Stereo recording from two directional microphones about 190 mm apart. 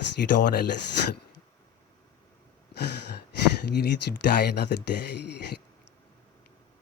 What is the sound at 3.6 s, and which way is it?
Speech, 60° left (ahead or behind).